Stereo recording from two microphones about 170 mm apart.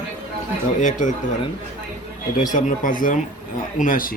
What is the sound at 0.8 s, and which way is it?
Speech, 45° left (ahead or behind).